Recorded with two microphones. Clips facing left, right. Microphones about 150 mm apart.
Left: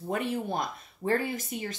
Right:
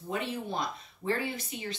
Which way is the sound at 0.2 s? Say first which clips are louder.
Left 3 dB; 50° left (ahead or behind).